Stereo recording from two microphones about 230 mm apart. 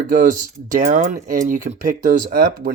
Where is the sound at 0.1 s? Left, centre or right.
Right.